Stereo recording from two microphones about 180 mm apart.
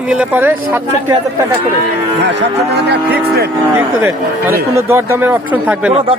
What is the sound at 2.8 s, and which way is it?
Livestock, 65° right (ahead or behind).